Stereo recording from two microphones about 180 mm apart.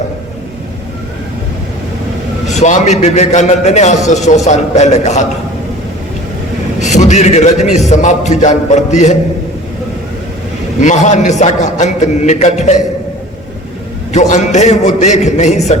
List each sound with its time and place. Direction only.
2.5 s a man's voice: 40° left (ahead or behind)
6.7 s a man's voice: 40° left (ahead or behind)
10.8 s a man's voice: 40° left (ahead or behind)
14.1 s a man's voice: 40° left (ahead or behind)